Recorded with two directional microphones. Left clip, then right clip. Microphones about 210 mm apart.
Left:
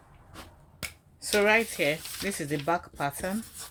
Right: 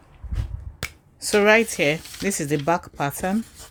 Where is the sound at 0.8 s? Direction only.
45° right (ahead or behind).